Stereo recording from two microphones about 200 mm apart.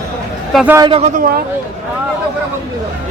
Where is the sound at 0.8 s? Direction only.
25° right (ahead or behind).